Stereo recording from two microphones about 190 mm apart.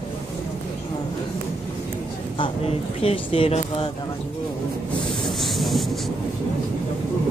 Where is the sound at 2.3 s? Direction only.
30° left (ahead or behind).